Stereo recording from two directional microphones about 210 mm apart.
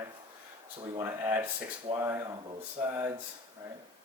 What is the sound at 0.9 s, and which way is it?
Speech, 10° right (ahead or behind).